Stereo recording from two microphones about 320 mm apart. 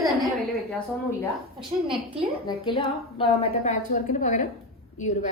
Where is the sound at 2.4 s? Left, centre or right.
Centre.